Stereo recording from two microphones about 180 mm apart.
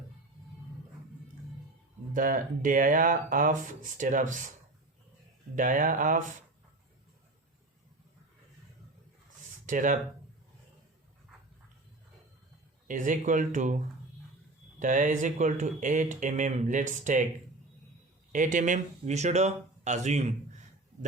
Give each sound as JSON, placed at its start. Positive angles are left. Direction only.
{"t": 2.1, "sound": "speech", "side_deg": -50}
{"t": 5.5, "sound": "speech", "side_deg": -45}
{"t": 9.6, "sound": "speech", "side_deg": -45}
{"t": 12.9, "sound": "speech", "side_deg": -45}
{"t": 14.8, "sound": "speech", "side_deg": -45}
{"t": 18.3, "sound": "speech", "side_deg": -45}